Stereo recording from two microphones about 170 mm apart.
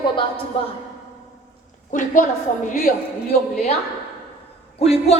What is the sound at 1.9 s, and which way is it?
Speech, 50° left (ahead or behind).